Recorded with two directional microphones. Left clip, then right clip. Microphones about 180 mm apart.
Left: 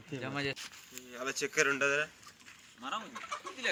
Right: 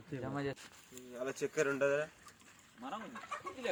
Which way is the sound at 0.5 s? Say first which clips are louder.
Left 6 dB; 40° right (ahead or behind).